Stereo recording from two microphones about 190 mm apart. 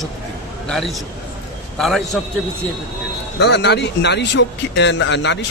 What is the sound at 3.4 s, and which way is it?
Speech, 60° left (ahead or behind).